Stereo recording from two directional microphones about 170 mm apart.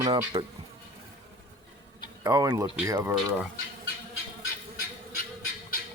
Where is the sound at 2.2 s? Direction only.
20° right (ahead or behind).